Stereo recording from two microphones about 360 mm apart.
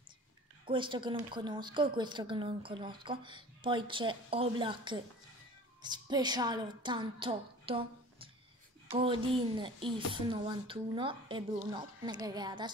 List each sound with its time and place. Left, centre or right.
0.7 s a woman's voice: centre